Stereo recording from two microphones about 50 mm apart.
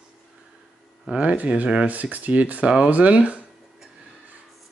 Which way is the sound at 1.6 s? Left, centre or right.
Centre.